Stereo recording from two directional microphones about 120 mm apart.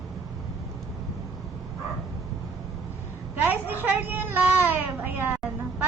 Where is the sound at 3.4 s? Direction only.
15° right (ahead or behind).